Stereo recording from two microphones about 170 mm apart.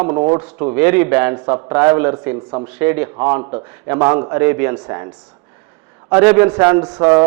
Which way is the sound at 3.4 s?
35° right (ahead or behind).